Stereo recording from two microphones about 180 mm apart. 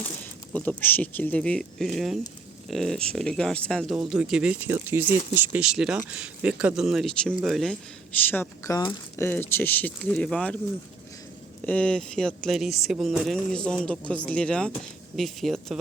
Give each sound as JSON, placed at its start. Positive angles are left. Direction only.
{"t": 0.5, "sound": "speech", "side_deg": 10}
{"t": 8.3, "sound": "speech", "side_deg": 15}
{"t": 11.6, "sound": "speech", "side_deg": 5}